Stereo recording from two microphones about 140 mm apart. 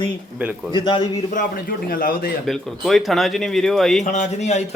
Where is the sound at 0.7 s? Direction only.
35° left (ahead or behind).